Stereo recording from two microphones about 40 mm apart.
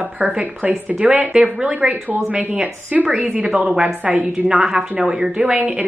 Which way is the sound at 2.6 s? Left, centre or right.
Right.